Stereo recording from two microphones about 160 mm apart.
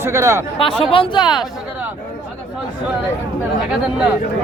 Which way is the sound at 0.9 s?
30° left (ahead or behind).